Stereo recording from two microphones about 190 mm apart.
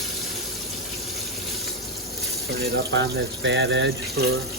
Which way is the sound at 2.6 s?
65° right (ahead or behind).